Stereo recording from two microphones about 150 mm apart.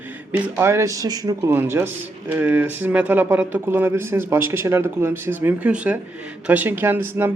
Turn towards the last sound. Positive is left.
turn(degrees=-15)  # may be behind; listen again after turning